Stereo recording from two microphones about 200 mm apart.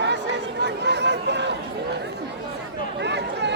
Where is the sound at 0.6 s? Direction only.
55° right (ahead or behind).